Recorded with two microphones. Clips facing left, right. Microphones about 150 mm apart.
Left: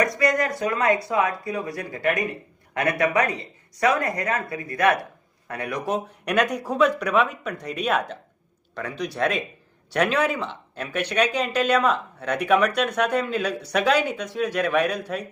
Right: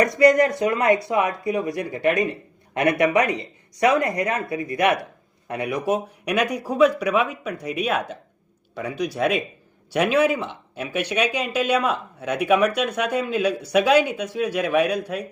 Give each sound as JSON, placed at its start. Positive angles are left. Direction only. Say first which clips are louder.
{"t": 0.0, "sound": "speech", "louder": "right 6 dB", "side_deg": -30}